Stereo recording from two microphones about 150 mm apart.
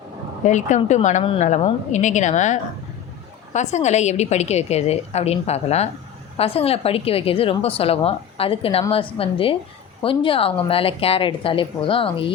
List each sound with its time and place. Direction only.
0.4 s a woman's voice: 55° left (ahead or behind); by 12.2 s 35° left (ahead or behind)